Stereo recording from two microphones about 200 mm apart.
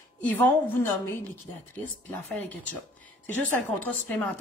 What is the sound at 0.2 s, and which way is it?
Speech, 10° left (ahead or behind).